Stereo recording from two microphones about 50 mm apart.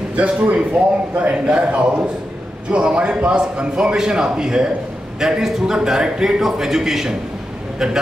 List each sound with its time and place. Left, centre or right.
0.1 s a man's voice: right; by 7.2 s centre